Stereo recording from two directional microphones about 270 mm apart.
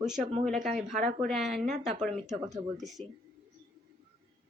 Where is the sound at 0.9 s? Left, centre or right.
Right.